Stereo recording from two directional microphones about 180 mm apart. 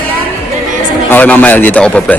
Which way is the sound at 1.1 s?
10° left (ahead or behind).